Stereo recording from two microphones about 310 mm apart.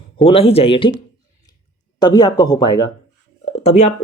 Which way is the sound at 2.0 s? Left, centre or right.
Centre.